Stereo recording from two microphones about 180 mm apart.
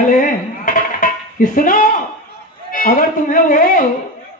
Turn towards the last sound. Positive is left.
turn(degrees=50)  # may be behind; listen again after turning